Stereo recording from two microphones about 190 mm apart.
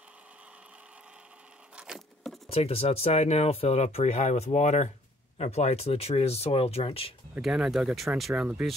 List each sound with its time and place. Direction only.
1.8 s keys jangling: centre (ahead or behind)
2.5 s speech: 30° left (ahead or behind)
7.3 s speech: 5° right (ahead or behind)